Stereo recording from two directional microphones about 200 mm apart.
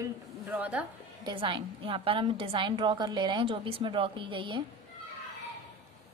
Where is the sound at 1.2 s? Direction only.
25° right (ahead or behind).